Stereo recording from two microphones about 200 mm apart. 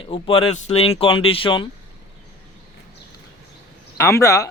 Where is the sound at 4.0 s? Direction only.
15° left (ahead or behind).